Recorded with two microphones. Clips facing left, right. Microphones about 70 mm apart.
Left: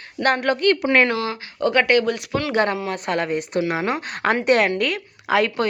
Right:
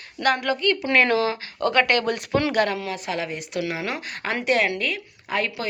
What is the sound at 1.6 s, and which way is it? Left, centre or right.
Speech, left.